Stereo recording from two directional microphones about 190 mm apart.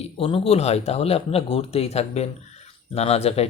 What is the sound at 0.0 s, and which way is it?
Speech, 30° left (ahead or behind).